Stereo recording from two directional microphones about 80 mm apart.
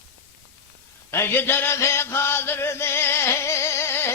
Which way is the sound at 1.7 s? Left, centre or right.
Left.